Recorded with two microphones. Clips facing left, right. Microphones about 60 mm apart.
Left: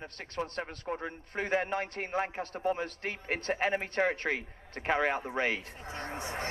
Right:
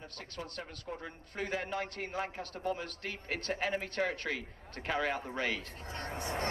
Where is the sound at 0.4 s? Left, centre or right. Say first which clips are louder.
Left 8 dB; left.